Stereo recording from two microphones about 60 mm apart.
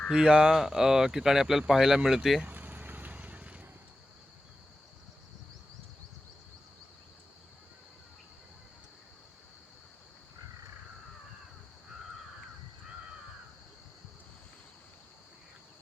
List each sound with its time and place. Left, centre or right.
0.1 s speech: centre
0.5 s speech: centre
2.4 s vehicle: right